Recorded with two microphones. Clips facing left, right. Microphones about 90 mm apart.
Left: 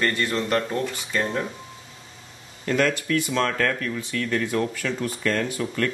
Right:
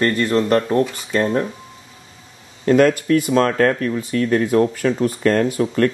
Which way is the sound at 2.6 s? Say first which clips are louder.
Right 9 dB; 45° right (ahead or behind).